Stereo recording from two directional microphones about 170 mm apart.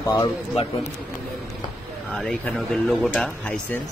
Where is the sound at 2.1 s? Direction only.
5° left (ahead or behind).